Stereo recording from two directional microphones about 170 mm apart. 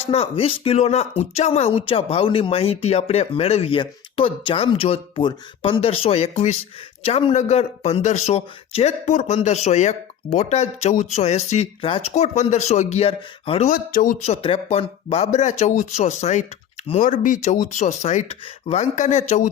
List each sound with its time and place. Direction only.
0.0 s speech: 35° left (ahead or behind)
13.7 s speech: 55° left (ahead or behind)
14.3 s speech: 35° left (ahead or behind)